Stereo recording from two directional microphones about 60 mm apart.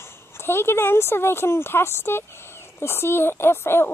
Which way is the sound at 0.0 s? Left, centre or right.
Left.